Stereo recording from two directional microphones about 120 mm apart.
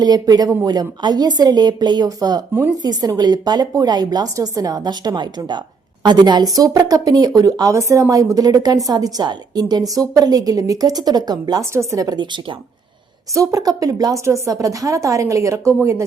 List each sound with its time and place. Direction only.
0.0 s a woman's voice: 30° right (ahead or behind)
11.6 s a woman's voice: 25° right (ahead or behind); by 12.5 s 40° right (ahead or behind)
13.3 s a woman's voice: 25° right (ahead or behind)